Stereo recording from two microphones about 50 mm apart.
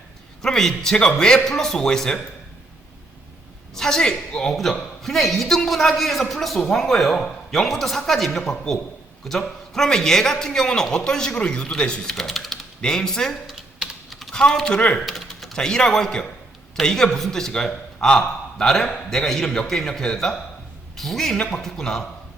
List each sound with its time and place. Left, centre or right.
0.4 s a man's voice: centre
3.8 s a man's voice: centre
12.1 s speech: centre
12.8 s a man's voice: centre
13.5 s typing: centre
14.3 s a man's voice: centre
14.8 s speech: left
15.0 s typing: centre
15.5 s a man's voice: centre